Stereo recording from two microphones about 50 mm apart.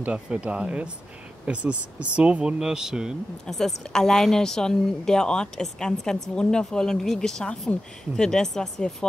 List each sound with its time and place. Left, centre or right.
0.0 s speech: right
3.4 s speech: centre